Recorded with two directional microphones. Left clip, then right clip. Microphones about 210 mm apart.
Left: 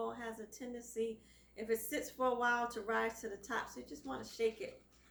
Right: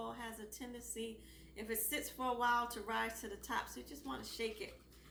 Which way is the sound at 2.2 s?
5° right (ahead or behind).